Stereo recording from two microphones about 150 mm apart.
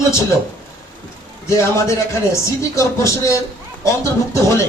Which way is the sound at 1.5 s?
20° left (ahead or behind).